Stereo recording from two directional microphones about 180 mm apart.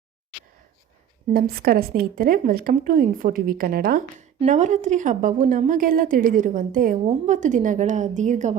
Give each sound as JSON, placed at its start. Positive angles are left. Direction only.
{"t": 1.3, "sound": "a woman's voice", "side_deg": -55}
{"t": 4.4, "sound": "a woman's voice", "side_deg": -40}